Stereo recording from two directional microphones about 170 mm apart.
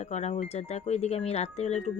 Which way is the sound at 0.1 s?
40° left (ahead or behind).